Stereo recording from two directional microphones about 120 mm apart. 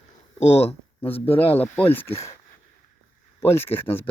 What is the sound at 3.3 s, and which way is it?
Speech, 20° left (ahead or behind).